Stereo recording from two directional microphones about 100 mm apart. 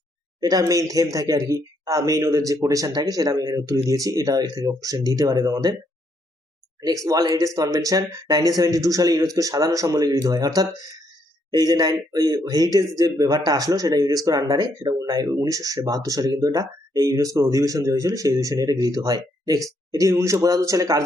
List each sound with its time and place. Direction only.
0.3 s speech: 40° right (ahead or behind)
6.8 s speech: 35° right (ahead or behind)